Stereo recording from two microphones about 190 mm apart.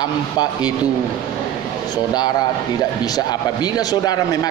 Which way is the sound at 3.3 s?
20° left (ahead or behind).